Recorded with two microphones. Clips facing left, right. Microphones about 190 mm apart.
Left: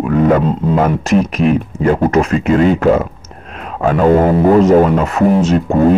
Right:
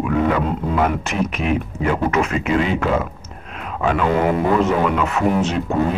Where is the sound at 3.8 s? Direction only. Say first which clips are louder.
Left 7 dB; 45° left (ahead or behind).